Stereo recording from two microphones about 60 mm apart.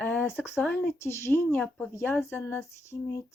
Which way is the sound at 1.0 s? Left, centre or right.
Left.